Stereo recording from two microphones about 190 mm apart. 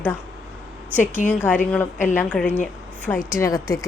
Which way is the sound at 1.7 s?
10° left (ahead or behind).